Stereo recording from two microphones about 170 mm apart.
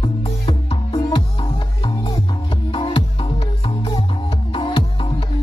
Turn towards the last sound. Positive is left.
turn(degrees=30)  # may be behind; listen again after turning